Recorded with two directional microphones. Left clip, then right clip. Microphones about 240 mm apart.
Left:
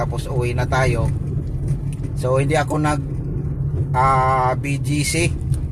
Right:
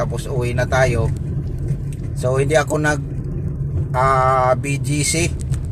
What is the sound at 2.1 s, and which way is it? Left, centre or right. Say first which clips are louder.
Speech: right 2 dB; centre.